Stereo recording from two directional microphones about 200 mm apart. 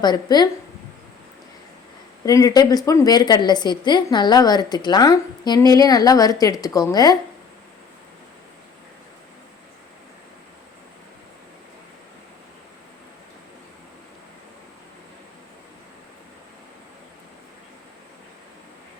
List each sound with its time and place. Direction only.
0.0 s a woman's voice: 20° left (ahead or behind)
2.2 s a woman's voice: 20° left (ahead or behind)